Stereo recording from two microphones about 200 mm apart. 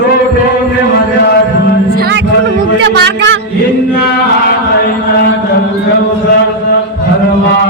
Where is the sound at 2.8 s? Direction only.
65° right (ahead or behind).